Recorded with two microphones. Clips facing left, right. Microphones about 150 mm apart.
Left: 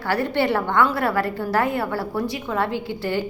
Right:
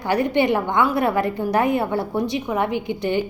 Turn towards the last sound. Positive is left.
turn(degrees=-20)  # may be behind; listen again after turning